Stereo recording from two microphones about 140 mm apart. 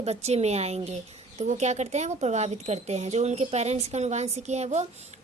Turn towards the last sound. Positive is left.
turn(degrees=-55)  # may be behind; listen again after turning